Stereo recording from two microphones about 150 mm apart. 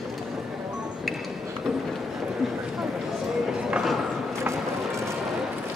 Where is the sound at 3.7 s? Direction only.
Centre (ahead or behind).